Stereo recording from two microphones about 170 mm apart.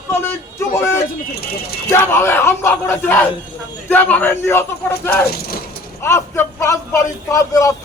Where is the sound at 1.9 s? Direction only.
15° left (ahead or behind).